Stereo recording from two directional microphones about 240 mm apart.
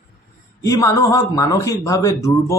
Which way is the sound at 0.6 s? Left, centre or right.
Centre.